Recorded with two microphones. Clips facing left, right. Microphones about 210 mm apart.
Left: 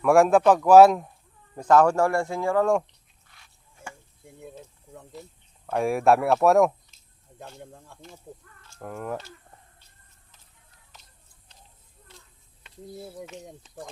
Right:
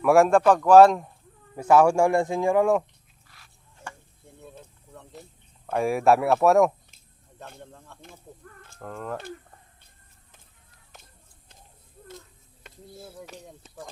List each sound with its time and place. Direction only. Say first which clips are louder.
0.0 s speech: even; centre (ahead or behind)
1.5 s a man's voice: right 1 dB; 10° right (ahead or behind)
3.2 s a sound: right 1 dB; centre (ahead or behind)
4.4 s mechanisms: left 3 dB; 15° left (ahead or behind)
5.7 s speech: even; centre (ahead or behind)
7.6 s speech: left 1 dB; 10° left (ahead or behind)
10.9 s a sound: right 3 dB; 50° right (ahead or behind)
13.2 s speech: left 3 dB; 35° right (ahead or behind)